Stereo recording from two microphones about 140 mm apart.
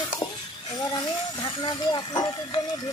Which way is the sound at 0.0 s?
35° left (ahead or behind).